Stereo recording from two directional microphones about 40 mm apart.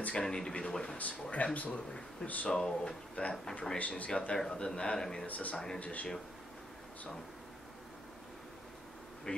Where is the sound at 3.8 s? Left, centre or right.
Left.